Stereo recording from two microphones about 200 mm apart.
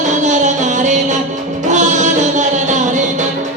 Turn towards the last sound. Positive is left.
turn(degrees=-35)  # may be behind; listen again after turning